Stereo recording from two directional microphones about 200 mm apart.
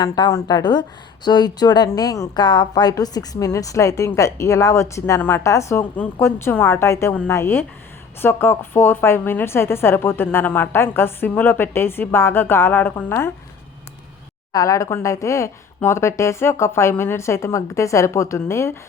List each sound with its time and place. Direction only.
0.0 s a woman's voice: 20° left (ahead or behind)
14.5 s a woman's voice: 15° left (ahead or behind)